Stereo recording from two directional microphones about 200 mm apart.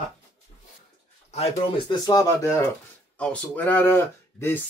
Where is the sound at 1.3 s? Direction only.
30° left (ahead or behind).